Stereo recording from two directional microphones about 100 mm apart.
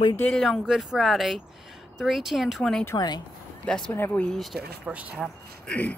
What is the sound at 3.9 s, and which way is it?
Speech, 20° left (ahead or behind).